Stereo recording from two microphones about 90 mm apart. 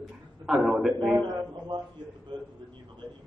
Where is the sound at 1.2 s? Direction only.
45° right (ahead or behind).